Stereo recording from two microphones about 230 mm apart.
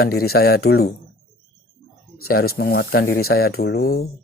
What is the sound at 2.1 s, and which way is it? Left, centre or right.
Speech, left.